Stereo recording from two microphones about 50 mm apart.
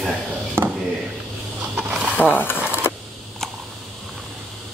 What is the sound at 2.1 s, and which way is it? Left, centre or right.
Speech, left.